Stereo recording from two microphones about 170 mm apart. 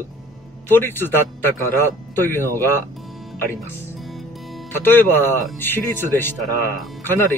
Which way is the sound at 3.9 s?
Centre (ahead or behind).